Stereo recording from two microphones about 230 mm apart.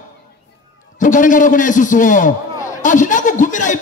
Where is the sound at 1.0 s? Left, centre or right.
Left.